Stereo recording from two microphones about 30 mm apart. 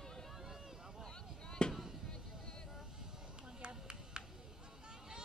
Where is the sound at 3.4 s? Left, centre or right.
Right.